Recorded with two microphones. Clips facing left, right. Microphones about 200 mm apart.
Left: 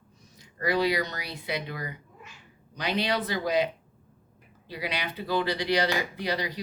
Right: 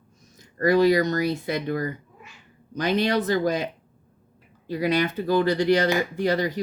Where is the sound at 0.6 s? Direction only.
45° right (ahead or behind).